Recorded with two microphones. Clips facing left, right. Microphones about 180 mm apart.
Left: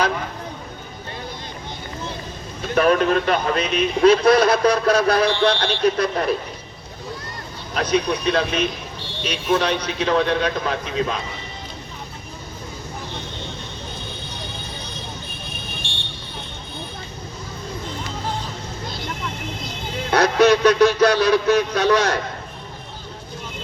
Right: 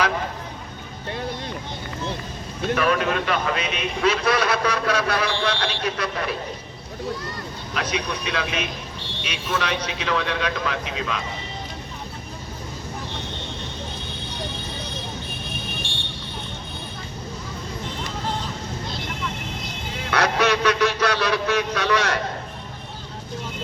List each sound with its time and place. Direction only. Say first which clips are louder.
2.7 s a man's voice: left 6 dB; 40° left (ahead or behind)
7.7 s a man's voice: left 7 dB; 40° left (ahead or behind)
20.1 s a man's voice: left 6 dB; 40° left (ahead or behind)